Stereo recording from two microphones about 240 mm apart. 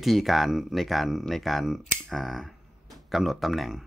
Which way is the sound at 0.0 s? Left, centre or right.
Centre.